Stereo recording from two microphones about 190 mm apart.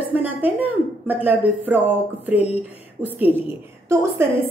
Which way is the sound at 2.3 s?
35° left (ahead or behind).